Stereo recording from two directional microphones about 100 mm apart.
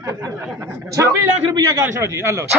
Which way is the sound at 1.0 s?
30° right (ahead or behind).